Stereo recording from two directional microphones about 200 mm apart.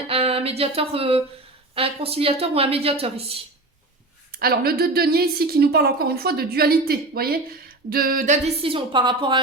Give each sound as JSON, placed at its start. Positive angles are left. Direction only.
{"t": 0.1, "sound": "a sound", "side_deg": -30}
{"t": 1.7, "sound": "speech", "side_deg": -30}
{"t": 4.3, "sound": "a woman's voice", "side_deg": -50}
{"t": 8.6, "sound": "speech", "side_deg": -25}